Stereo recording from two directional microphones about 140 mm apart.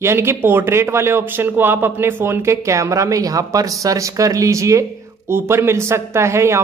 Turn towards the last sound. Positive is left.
turn(degrees=-20)  # may be behind; listen again after turning